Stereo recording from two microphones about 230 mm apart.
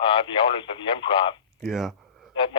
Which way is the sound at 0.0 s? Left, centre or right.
Left.